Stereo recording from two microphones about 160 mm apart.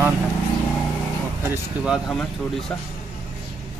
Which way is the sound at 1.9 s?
Centre (ahead or behind).